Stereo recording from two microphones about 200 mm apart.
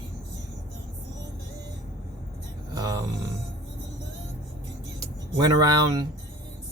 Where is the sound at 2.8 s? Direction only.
20° right (ahead or behind).